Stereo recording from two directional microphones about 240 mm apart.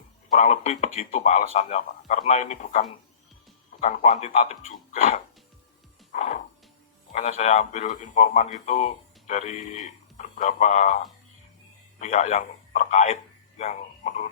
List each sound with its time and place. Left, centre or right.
0.3 s speech: left
6.1 s music: left
7.1 s speech: left
11.9 s speech: left
13.6 s a sound: left